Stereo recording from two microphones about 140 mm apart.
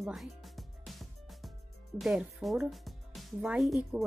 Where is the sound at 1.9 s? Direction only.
Centre (ahead or behind).